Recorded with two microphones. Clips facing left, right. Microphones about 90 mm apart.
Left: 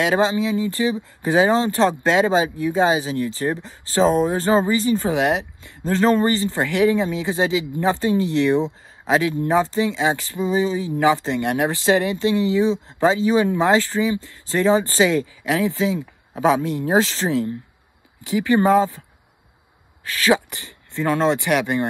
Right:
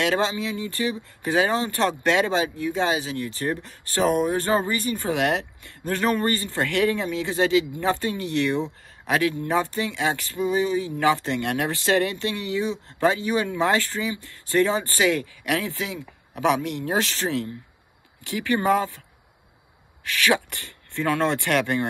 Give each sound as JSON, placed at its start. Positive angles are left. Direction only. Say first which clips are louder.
{"t": 0.0, "sound": "speech", "louder": "left 5 dB", "side_deg": 20}
{"t": 20.2, "sound": "speech", "louder": "left 4 dB", "side_deg": 20}